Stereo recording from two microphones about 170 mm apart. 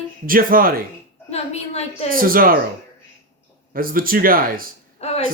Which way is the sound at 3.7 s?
55° right (ahead or behind).